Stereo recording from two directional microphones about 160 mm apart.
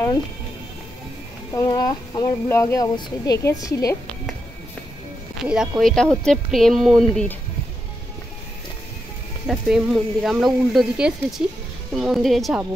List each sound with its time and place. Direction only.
1.5 s speech: 20° left (ahead or behind)
5.4 s speech: 5° right (ahead or behind)
9.5 s speech: 5° right (ahead or behind)